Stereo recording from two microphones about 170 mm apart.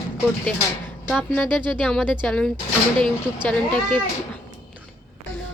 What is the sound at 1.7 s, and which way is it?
A woman's voice, 5° left (ahead or behind).